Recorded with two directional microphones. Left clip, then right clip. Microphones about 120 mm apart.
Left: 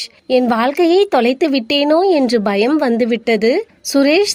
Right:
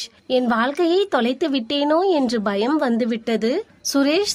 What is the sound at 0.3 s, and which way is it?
A woman's voice, 30° left (ahead or behind).